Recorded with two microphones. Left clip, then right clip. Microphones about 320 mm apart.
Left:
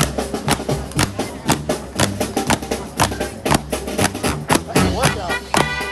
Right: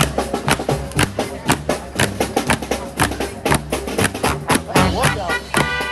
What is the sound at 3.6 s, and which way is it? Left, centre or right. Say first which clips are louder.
Music: right 1 dB; centre.